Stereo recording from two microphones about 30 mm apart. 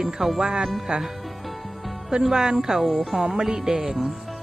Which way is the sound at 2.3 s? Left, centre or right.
Right.